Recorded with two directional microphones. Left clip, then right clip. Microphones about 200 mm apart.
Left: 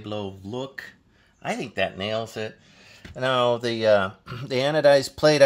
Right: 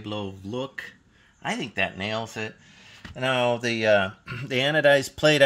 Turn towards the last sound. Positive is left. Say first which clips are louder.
# left 2 dB
turn(degrees=10)  # may be behind; listen again after turning